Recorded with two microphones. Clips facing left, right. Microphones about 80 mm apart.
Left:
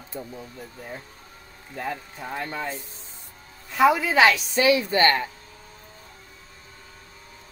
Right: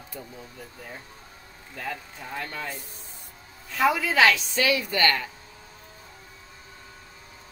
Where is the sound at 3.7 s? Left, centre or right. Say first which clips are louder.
Left 4 dB; centre.